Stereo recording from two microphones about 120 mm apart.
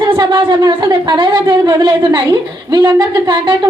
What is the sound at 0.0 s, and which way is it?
Speech, 40° right (ahead or behind).